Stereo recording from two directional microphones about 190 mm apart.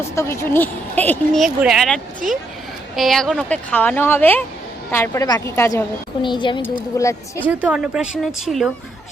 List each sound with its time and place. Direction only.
0.2 s speech: 10° left (ahead or behind)
6.2 s speech: 25° left (ahead or behind)
7.4 s speech: 5° right (ahead or behind)